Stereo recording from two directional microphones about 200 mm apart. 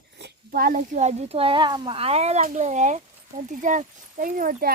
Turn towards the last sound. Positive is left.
turn(degrees=-45)  # may be behind; listen again after turning